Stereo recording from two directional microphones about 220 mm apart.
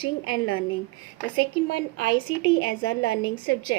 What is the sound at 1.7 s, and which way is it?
A woman's voice, 60° left (ahead or behind).